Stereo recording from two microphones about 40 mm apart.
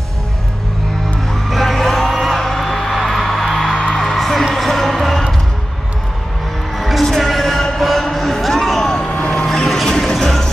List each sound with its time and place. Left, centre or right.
1.5 s music: centre
3.9 s music: centre
6.8 s a sound: centre
9.0 s vehicle: left
9.8 s music: centre